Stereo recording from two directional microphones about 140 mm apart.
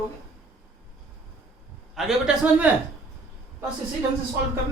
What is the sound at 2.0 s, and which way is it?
Speech, 5° right (ahead or behind).